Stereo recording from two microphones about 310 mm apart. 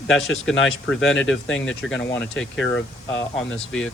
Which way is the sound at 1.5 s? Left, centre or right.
Left.